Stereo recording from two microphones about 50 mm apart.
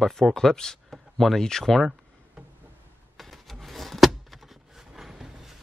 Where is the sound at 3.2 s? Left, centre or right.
Centre.